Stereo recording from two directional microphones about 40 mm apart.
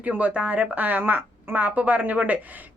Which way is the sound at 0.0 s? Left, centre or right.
Right.